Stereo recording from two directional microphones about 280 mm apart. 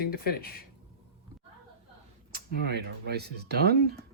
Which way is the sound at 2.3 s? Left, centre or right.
Right.